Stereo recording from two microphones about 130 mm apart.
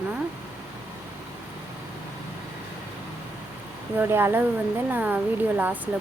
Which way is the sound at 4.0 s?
15° right (ahead or behind).